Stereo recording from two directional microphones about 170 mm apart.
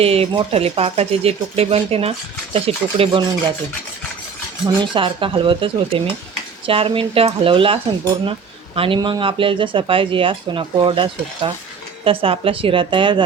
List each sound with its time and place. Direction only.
0.0 s speech: 35° right (ahead or behind)
4.6 s speech: 30° right (ahead or behind)